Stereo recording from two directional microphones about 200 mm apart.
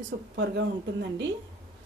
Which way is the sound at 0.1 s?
50° right (ahead or behind).